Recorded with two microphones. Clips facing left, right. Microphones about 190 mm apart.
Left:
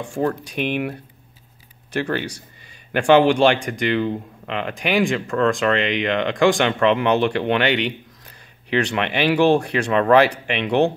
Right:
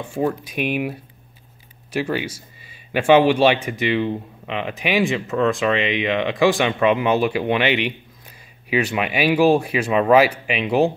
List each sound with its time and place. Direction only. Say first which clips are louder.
0.0 s a man's voice: even; 5° right (ahead or behind)